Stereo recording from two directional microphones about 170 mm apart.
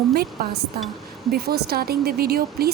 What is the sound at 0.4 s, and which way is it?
A woman's voice, 60° right (ahead or behind).